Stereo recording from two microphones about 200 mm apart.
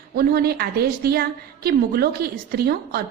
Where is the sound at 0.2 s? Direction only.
50° right (ahead or behind).